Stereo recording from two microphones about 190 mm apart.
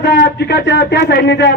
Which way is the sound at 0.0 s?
60° left (ahead or behind).